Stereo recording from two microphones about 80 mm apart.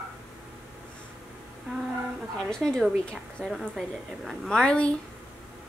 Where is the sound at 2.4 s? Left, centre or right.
Centre.